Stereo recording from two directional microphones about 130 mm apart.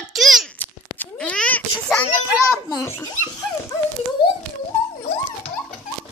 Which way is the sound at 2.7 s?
30° left (ahead or behind).